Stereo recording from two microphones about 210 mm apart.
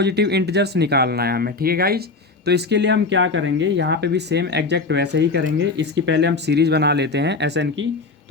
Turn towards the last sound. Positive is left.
turn(degrees=-60)  # may be behind; listen again after turning